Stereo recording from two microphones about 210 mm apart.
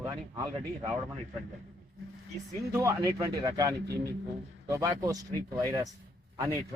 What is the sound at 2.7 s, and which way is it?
Speech, 15° right (ahead or behind).